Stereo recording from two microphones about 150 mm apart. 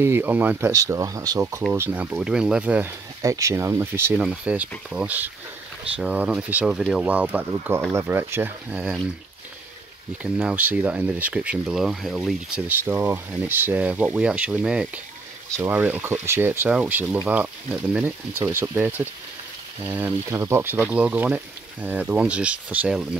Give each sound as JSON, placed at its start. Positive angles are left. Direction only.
{"t": 0.0, "sound": "speech", "side_deg": -15}
{"t": 1.7, "sound": "speech", "side_deg": -15}
{"t": 3.2, "sound": "speech", "side_deg": -20}
{"t": 10.2, "sound": "speech", "side_deg": -10}
{"t": 12.6, "sound": "speech", "side_deg": -15}